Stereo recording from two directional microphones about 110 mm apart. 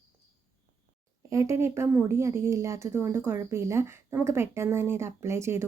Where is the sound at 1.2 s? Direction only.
30° right (ahead or behind).